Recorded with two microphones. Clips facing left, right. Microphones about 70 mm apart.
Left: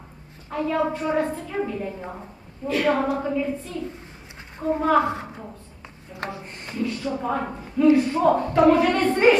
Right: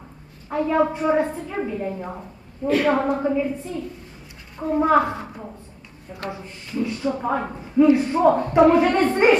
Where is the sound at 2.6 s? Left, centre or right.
Right.